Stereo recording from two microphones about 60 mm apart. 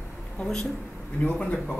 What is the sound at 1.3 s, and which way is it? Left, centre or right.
Speech, left.